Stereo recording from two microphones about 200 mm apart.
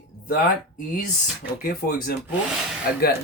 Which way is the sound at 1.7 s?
50° left (ahead or behind).